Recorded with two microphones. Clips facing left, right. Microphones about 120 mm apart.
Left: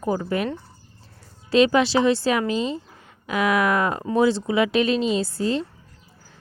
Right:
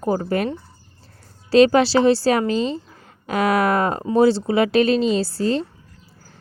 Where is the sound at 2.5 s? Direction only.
5° left (ahead or behind).